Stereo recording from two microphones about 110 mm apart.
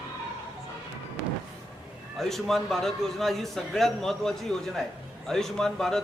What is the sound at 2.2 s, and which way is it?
A man's voice, 5° left (ahead or behind).